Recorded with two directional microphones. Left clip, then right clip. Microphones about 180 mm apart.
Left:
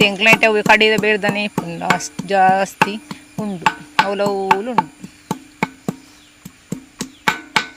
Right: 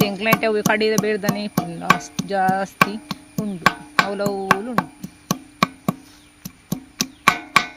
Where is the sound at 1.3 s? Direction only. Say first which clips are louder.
Left 4 dB; 30° left (ahead or behind).